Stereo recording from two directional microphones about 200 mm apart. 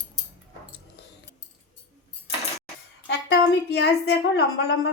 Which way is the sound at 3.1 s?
60° left (ahead or behind).